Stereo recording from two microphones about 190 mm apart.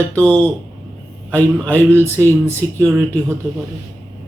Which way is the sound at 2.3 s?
15° right (ahead or behind).